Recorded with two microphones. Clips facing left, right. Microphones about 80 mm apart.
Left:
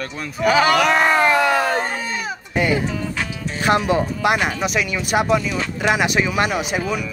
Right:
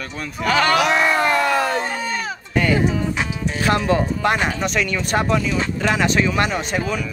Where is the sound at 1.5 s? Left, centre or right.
Left.